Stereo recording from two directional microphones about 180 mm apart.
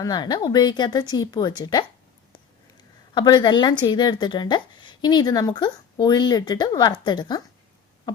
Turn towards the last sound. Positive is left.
turn(degrees=25)  # may be behind; listen again after turning